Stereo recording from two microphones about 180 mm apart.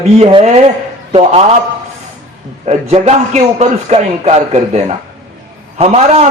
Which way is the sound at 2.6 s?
35° right (ahead or behind).